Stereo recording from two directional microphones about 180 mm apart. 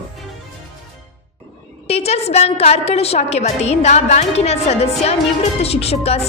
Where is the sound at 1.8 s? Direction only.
35° left (ahead or behind).